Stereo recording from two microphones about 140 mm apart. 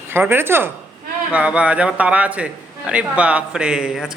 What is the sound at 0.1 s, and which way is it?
A man's voice, 15° right (ahead or behind).